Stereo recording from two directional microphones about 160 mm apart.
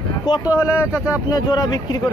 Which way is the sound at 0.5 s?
15° left (ahead or behind).